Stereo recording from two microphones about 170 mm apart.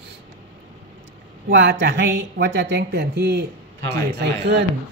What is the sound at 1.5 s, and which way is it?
Speech, 90° right.